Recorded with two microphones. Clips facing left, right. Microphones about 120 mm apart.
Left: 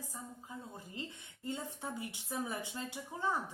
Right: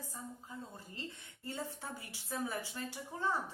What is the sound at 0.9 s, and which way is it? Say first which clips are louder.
A woman's voice: left 2 dB; 15° left (ahead or behind).